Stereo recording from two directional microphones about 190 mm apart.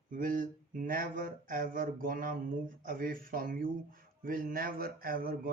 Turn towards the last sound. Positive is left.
turn(degrees=-50)  # may be behind; listen again after turning